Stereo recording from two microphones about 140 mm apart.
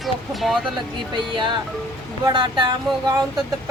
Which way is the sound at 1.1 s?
35° right (ahead or behind).